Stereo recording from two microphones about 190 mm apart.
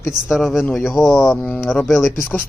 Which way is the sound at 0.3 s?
Centre (ahead or behind).